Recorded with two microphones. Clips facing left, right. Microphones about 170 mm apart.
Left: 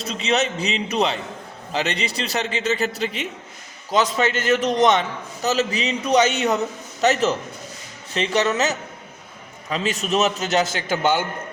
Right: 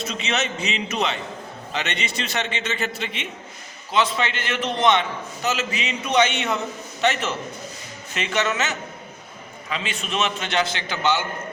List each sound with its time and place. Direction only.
0.0 s a man's voice: 35° left (ahead or behind)